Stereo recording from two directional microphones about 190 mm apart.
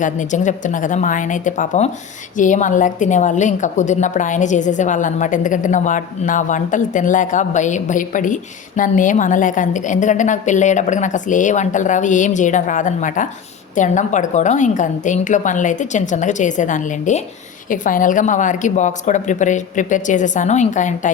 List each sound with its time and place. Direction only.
0.0 s a woman's voice: 40° left (ahead or behind)